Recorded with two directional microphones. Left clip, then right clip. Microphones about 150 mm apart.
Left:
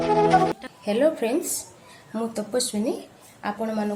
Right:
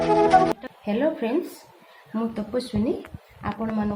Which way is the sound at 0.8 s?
10° left (ahead or behind).